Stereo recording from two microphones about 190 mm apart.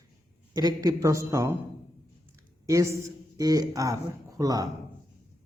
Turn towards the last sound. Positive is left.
turn(degrees=-20)  # may be behind; listen again after turning